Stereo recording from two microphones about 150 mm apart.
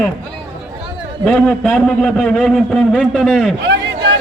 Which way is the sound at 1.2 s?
5° left (ahead or behind).